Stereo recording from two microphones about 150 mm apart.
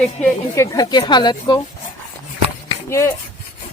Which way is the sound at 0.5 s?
20° left (ahead or behind).